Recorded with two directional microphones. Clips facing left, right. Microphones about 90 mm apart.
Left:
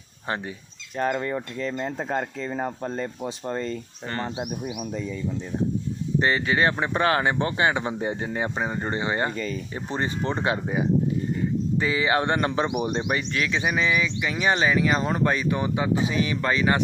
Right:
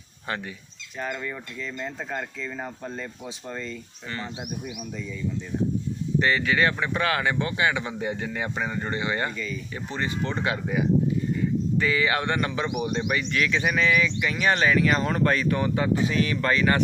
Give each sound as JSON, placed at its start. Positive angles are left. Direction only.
{"t": 0.3, "sound": "speech", "side_deg": 25}
{"t": 1.2, "sound": "speech", "side_deg": 45}
{"t": 6.1, "sound": "speech", "side_deg": 30}
{"t": 9.3, "sound": "speech", "side_deg": 45}
{"t": 9.9, "sound": "speech", "side_deg": 30}